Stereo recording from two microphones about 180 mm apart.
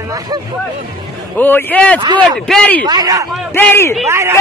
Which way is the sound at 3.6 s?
15° left (ahead or behind).